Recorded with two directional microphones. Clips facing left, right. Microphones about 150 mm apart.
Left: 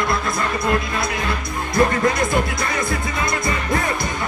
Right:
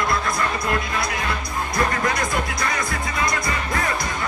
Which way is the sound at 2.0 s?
25° left (ahead or behind).